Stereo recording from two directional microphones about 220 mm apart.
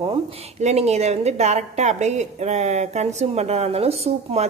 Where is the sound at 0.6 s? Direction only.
30° right (ahead or behind).